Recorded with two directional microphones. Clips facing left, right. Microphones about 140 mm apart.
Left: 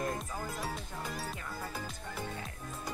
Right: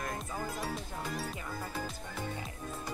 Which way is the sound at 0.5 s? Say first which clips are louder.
Right 1 dB; centre (ahead or behind).